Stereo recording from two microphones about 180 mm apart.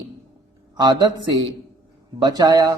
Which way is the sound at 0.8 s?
25° right (ahead or behind).